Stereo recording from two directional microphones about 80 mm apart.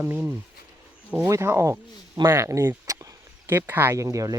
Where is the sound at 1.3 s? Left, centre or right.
Right.